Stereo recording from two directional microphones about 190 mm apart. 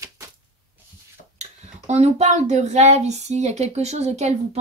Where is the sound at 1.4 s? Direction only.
35° right (ahead or behind).